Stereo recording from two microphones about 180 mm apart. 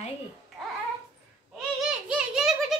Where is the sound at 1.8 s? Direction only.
5° right (ahead or behind).